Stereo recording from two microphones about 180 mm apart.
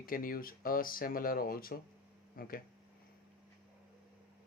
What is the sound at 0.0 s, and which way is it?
Speech, 50° left (ahead or behind).